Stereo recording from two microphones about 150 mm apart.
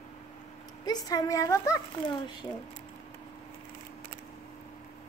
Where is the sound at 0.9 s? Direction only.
25° left (ahead or behind).